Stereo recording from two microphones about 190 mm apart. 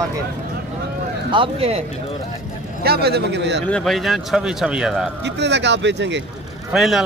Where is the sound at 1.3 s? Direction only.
30° right (ahead or behind).